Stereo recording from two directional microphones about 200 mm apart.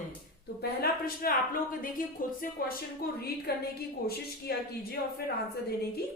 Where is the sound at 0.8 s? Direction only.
45° left (ahead or behind).